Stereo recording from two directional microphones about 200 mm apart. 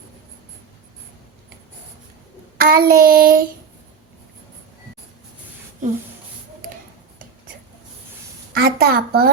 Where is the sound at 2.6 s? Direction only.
45° right (ahead or behind).